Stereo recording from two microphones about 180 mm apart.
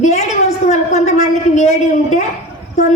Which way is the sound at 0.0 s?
40° left (ahead or behind).